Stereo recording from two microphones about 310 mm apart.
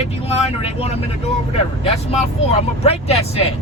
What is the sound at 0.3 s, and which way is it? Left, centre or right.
Speech, centre.